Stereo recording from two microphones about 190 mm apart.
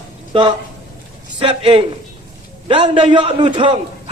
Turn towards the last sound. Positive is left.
turn(degrees=-25)  # may be behind; listen again after turning